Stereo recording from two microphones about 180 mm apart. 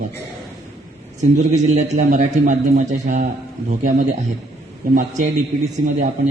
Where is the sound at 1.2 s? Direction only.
40° right (ahead or behind).